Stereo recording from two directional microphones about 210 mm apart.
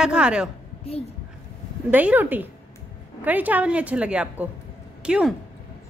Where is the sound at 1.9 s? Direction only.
10° right (ahead or behind).